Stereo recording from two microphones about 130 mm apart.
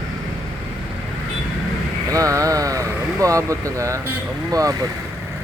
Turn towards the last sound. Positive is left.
turn(degrees=-25)  # may be behind; listen again after turning